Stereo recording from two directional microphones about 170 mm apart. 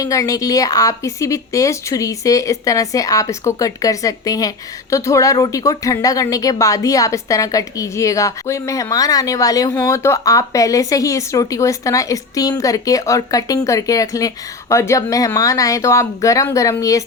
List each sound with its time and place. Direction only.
0.0 s a woman's voice: 20° left (ahead or behind)